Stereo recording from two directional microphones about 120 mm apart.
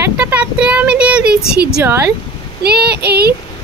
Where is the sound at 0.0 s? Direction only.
10° right (ahead or behind).